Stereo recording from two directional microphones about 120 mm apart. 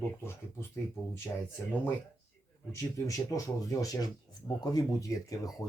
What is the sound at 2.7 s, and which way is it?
Speech, 25° left (ahead or behind).